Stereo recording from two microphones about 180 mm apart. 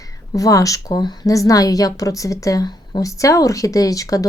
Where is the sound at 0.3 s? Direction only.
20° left (ahead or behind).